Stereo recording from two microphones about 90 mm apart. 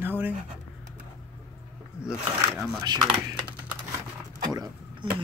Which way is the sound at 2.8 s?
50° right (ahead or behind).